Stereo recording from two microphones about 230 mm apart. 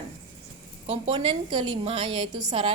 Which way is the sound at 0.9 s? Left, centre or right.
Right.